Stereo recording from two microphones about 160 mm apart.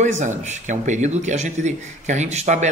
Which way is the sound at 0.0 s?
45° right (ahead or behind).